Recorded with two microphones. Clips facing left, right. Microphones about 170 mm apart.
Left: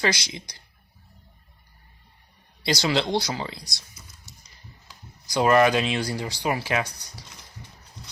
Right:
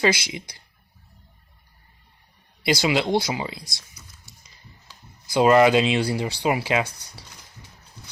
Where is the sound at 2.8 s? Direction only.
10° right (ahead or behind).